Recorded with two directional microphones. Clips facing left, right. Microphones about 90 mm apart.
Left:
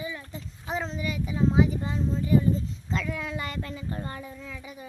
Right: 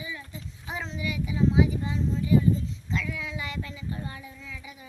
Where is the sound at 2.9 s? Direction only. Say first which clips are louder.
Left 2 dB; 45° left (ahead or behind).